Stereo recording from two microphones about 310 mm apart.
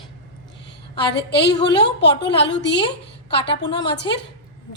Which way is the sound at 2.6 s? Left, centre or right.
Left.